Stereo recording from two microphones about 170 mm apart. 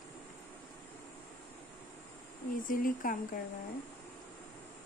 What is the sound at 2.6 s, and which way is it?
Speech, 55° left (ahead or behind).